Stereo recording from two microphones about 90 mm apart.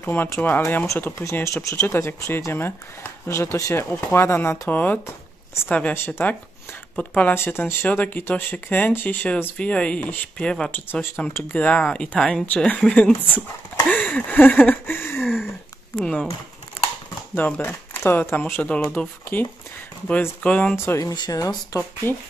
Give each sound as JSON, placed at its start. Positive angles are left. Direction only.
{"t": 0.0, "sound": "speech", "side_deg": 25}
{"t": 7.3, "sound": "speech", "side_deg": 25}
{"t": 10.7, "sound": "speech", "side_deg": 20}
{"t": 13.8, "sound": "a sound", "side_deg": 15}
{"t": 16.0, "sound": "speech", "side_deg": 10}
{"t": 17.4, "sound": "speech", "side_deg": 20}
{"t": 20.7, "sound": "speech", "side_deg": 30}
{"t": 21.0, "sound": "speech", "side_deg": 45}